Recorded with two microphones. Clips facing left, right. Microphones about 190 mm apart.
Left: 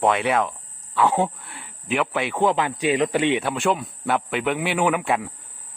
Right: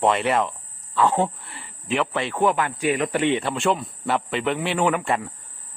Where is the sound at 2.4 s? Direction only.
15° left (ahead or behind).